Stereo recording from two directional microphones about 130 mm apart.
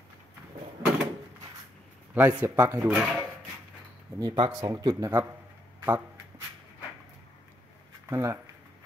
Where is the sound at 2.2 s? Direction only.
15° right (ahead or behind).